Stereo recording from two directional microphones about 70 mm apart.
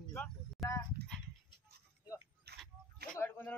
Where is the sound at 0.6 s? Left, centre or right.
Centre.